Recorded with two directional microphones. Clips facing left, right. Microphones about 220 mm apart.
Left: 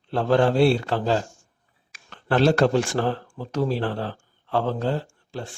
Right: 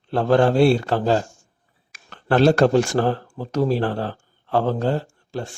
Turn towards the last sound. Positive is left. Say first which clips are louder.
# right 4 dB
turn(degrees=-45)  # may be behind; listen again after turning